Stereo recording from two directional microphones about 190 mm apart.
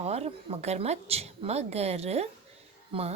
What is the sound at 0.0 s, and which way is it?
A woman's voice, 35° right (ahead or behind).